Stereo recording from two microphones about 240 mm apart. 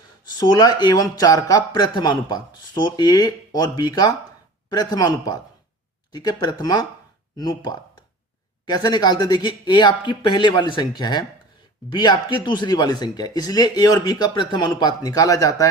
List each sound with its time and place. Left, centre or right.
0.3 s speech: centre